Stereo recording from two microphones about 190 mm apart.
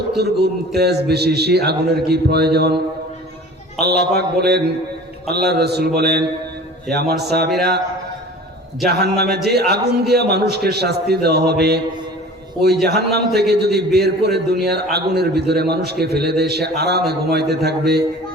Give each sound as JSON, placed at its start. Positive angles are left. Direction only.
{"t": 0.2, "sound": "a man's voice", "side_deg": -60}
{"t": 3.8, "sound": "a man's voice", "side_deg": -60}
{"t": 8.9, "sound": "a man's voice", "side_deg": -60}
{"t": 12.8, "sound": "a man's voice", "side_deg": -60}